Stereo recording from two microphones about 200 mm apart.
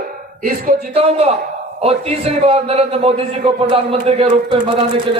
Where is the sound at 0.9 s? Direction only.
30° right (ahead or behind).